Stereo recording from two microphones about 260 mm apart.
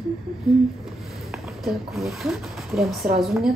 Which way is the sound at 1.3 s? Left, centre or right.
Centre.